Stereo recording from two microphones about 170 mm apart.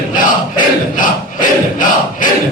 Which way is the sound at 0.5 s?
50° left (ahead or behind).